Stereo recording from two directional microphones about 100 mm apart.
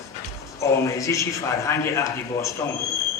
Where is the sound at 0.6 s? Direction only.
30° left (ahead or behind).